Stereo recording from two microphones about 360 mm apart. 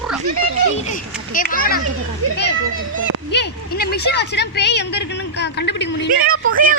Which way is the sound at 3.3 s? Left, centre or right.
Left.